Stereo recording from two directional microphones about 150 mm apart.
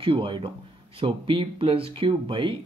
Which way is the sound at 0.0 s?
35° right (ahead or behind).